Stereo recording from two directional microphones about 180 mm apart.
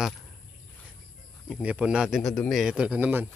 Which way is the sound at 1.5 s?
5° right (ahead or behind).